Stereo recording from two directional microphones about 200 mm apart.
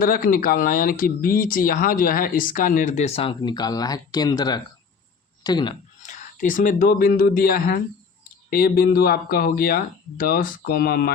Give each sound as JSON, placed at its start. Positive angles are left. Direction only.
{"t": 0.0, "sound": "speech", "side_deg": 45}
{"t": 6.0, "sound": "speech", "side_deg": 40}